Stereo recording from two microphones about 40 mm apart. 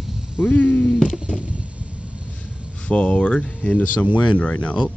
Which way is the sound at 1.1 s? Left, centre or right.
Right.